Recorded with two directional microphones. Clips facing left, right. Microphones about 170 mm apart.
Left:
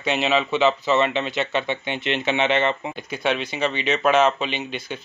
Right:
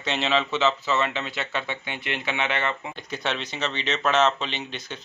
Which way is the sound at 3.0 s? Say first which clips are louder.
Left 6 dB; 10° left (ahead or behind).